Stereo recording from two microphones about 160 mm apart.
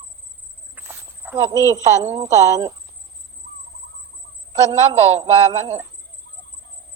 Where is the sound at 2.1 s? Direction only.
45° right (ahead or behind).